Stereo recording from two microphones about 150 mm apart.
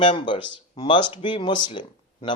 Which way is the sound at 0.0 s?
35° left (ahead or behind).